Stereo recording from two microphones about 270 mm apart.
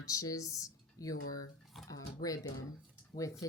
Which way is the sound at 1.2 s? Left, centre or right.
Left.